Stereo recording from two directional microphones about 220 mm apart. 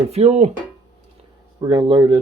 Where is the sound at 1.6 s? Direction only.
20° right (ahead or behind).